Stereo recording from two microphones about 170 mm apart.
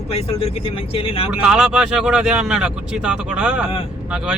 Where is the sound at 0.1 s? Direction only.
35° left (ahead or behind).